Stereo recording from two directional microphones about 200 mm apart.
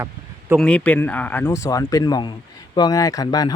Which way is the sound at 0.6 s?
5° left (ahead or behind).